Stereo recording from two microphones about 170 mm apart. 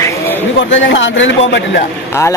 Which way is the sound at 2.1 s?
15° left (ahead or behind).